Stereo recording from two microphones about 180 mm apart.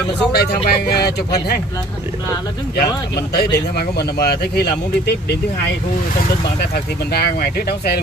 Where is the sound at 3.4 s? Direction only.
60° left (ahead or behind).